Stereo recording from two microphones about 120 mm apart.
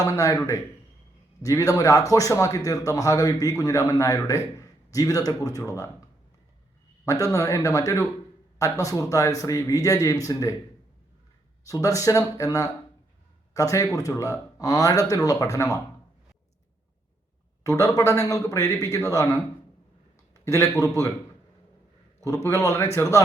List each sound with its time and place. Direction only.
0.0 s speech: 30° left (ahead or behind)
7.0 s speech: 25° left (ahead or behind)
11.6 s speech: 30° left (ahead or behind)
17.6 s a man's voice: 25° left (ahead or behind)
22.4 s speech: 25° left (ahead or behind)